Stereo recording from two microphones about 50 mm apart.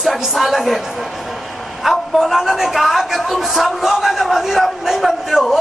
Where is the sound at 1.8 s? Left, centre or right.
Centre.